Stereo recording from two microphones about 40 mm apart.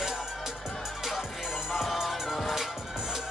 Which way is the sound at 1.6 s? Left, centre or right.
Centre.